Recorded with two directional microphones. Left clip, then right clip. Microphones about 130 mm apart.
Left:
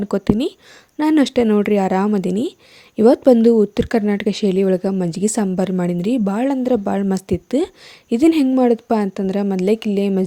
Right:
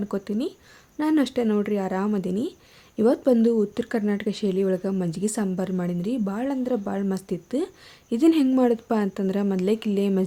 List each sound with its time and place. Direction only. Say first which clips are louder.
0.0 s a woman's voice: left 9 dB; 60° left (ahead or behind); by 10.2 s 40° left (ahead or behind)